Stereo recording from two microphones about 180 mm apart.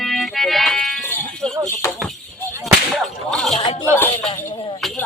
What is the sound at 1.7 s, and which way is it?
Speech, 15° left (ahead or behind).